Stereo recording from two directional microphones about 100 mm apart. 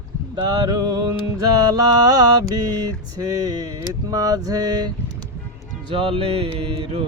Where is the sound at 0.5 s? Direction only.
45° right (ahead or behind).